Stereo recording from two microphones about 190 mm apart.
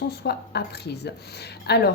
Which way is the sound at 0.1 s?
60° left (ahead or behind).